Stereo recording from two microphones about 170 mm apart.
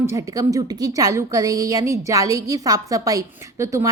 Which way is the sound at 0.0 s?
15° right (ahead or behind).